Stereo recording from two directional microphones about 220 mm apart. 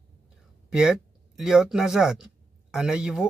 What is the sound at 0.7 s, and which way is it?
Speech, 5° right (ahead or behind).